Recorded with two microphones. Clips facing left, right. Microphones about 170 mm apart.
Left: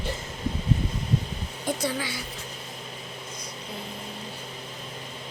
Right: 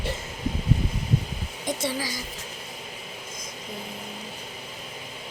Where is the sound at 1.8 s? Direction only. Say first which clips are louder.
Even; 30° right (ahead or behind).